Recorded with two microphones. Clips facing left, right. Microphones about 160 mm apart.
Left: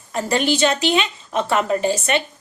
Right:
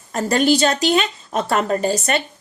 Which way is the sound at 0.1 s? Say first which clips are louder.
Right 3 dB; 40° right (ahead or behind).